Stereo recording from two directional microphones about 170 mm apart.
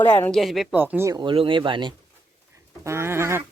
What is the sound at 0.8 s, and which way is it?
Speech, 10° right (ahead or behind).